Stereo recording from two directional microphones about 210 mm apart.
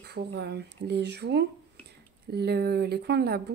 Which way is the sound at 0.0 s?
50° right (ahead or behind).